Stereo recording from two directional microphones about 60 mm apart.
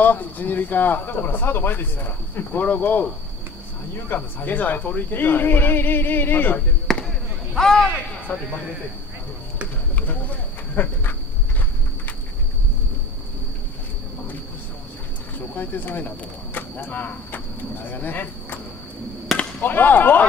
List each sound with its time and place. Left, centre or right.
0.0 s speech: left
4.1 s speech: left
6.9 s basketball bounce: centre
7.5 s speech: centre
8.3 s speech: left
10.7 s a sound: left
15.3 s speech: left
19.6 s speech: left